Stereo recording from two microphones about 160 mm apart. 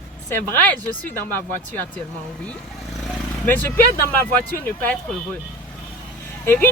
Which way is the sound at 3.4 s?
10° left (ahead or behind).